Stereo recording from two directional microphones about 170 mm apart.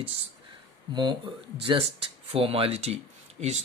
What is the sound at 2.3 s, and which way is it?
Speech, 35° right (ahead or behind).